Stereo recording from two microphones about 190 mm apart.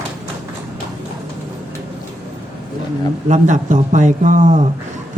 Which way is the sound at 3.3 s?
40° right (ahead or behind).